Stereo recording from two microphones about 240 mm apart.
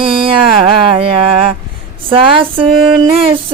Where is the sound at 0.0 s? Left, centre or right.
Right.